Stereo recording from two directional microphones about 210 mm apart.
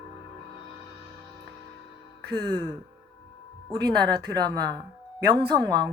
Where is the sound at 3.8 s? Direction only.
20° right (ahead or behind).